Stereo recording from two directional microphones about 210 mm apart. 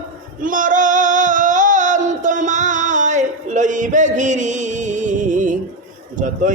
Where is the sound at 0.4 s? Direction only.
40° right (ahead or behind).